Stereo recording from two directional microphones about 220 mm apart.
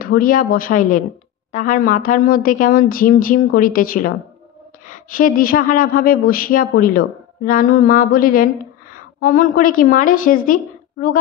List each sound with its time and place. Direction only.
0.0 s a woman's voice: 40° left (ahead or behind)